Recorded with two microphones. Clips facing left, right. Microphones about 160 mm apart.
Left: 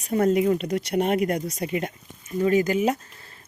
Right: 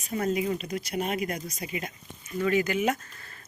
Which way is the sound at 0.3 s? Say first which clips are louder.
Left 7 dB; 55° left (ahead or behind).